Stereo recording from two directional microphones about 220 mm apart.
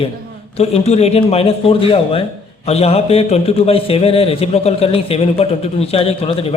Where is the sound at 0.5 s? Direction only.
30° left (ahead or behind).